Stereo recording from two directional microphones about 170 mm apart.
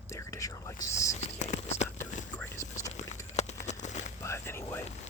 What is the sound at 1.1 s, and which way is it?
Whispering, 45° left (ahead or behind).